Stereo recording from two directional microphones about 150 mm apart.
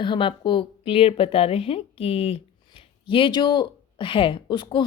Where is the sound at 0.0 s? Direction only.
35° left (ahead or behind).